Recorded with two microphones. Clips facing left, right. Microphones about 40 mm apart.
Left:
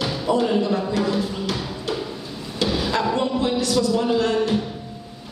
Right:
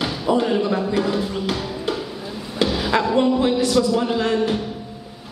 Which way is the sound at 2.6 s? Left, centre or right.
Centre.